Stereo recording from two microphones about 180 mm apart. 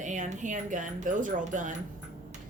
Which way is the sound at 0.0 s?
45° right (ahead or behind).